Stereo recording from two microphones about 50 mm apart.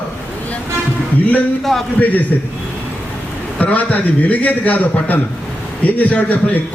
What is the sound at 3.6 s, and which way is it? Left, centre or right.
A man's voice, left.